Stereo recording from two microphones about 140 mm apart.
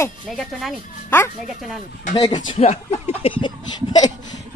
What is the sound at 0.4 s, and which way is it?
Speech, centre (ahead or behind).